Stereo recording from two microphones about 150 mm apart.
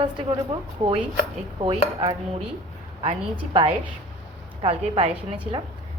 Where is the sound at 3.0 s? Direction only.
35° right (ahead or behind).